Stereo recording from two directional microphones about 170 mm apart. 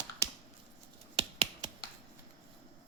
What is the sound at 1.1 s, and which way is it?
Finger snapping, 35° right (ahead or behind).